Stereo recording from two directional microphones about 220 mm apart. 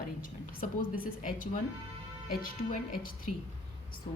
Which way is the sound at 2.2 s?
40° left (ahead or behind).